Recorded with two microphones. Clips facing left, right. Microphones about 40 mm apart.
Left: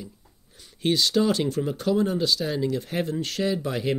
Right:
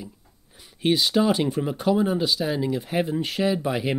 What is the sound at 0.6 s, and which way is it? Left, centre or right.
Speech, centre.